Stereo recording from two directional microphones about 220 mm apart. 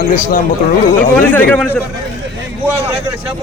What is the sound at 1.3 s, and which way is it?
Speech, 5° left (ahead or behind).